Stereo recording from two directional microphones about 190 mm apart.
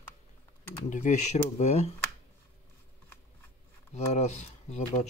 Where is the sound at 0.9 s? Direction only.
40° left (ahead or behind).